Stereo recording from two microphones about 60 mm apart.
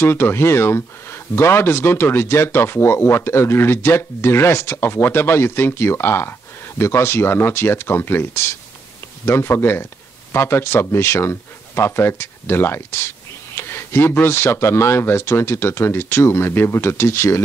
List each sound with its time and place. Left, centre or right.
0.0 s speech: left
13.6 s a sound: left
14.1 s speech: left